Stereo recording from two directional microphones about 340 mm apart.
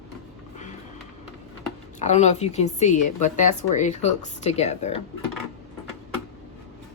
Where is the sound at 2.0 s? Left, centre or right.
Centre.